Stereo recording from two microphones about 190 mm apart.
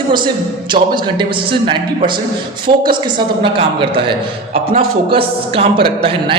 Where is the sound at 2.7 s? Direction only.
25° right (ahead or behind).